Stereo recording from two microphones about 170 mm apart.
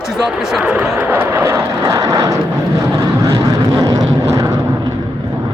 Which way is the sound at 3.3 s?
20° right (ahead or behind).